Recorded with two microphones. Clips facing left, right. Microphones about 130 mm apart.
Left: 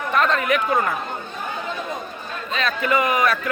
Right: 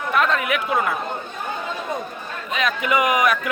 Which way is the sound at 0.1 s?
5° right (ahead or behind).